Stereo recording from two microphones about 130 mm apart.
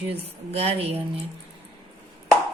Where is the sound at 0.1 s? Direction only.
50° right (ahead or behind).